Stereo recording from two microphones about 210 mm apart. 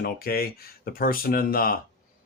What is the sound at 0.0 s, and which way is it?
Speech, 45° left (ahead or behind).